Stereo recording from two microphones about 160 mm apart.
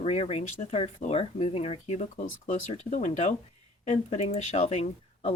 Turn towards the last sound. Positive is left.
turn(degrees=45)  # may be behind; listen again after turning